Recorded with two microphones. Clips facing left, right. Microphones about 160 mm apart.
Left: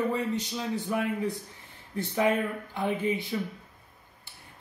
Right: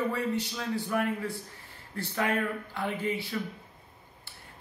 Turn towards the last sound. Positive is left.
turn(degrees=20)  # may be behind; listen again after turning